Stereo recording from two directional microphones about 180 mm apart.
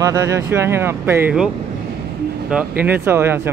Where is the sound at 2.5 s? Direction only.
10° right (ahead or behind).